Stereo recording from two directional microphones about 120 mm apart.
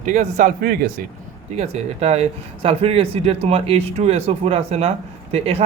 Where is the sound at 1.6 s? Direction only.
60° right (ahead or behind).